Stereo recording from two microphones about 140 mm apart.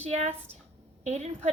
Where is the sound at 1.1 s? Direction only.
50° right (ahead or behind).